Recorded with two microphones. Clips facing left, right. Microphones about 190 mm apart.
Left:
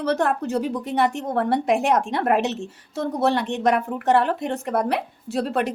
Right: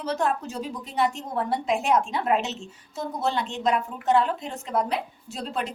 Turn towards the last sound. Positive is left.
turn(degrees=60)  # may be behind; listen again after turning